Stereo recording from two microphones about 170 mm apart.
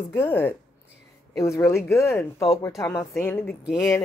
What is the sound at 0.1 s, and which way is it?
Speech, 15° left (ahead or behind).